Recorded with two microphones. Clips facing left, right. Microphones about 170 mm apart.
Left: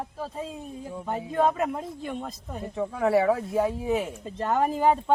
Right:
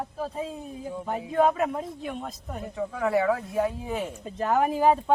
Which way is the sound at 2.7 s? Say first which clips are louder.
Left 2 dB; 30° left (ahead or behind).